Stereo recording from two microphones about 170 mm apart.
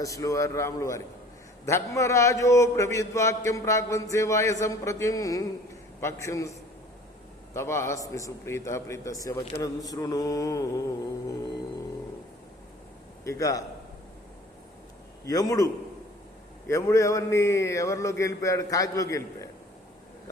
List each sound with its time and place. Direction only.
0.0 s mantra: 20° left (ahead or behind)
1.6 s a man's voice: 15° left (ahead or behind)
7.5 s a man's voice: 15° left (ahead or behind)
9.6 s mantra: 20° left (ahead or behind)
13.2 s mantra: 20° left (ahead or behind)
15.3 s mantra: 20° left (ahead or behind)
16.6 s a man's voice: 15° left (ahead or behind)